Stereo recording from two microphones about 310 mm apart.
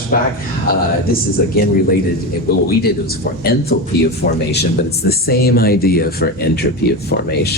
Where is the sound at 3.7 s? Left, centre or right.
Left.